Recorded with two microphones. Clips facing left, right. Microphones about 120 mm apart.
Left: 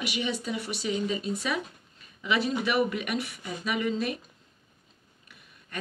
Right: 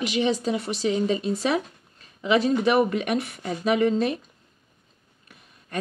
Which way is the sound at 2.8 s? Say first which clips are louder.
Right 5 dB; 45° right (ahead or behind).